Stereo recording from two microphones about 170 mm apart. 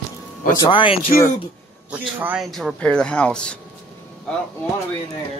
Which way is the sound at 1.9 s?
10° right (ahead or behind).